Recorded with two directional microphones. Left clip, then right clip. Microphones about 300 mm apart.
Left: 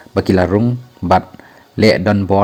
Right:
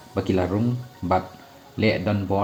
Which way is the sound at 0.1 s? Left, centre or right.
Left.